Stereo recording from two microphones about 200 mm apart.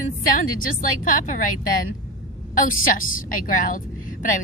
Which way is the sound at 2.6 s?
45° left (ahead or behind).